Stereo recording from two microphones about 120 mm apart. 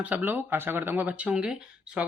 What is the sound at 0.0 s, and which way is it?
Speech, 15° right (ahead or behind).